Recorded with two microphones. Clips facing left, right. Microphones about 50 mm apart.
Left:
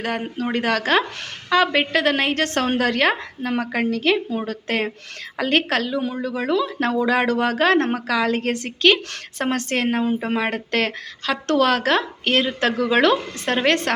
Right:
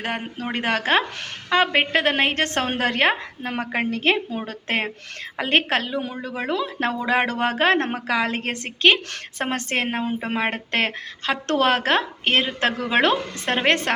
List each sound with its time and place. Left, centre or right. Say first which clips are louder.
0.0 s a woman's voice: left 3 dB; right